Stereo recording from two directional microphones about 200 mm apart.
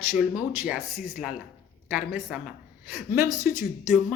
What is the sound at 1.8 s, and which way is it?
A woman's voice, 5° right (ahead or behind).